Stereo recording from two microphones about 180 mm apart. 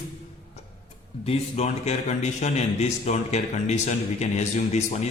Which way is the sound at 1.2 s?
35° left (ahead or behind).